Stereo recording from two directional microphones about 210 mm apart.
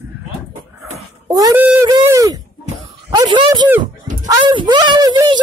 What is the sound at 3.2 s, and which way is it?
Dog, 20° right (ahead or behind).